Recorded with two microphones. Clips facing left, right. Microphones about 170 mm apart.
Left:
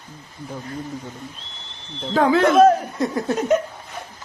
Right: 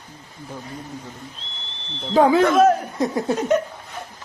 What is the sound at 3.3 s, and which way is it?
Speech, centre (ahead or behind).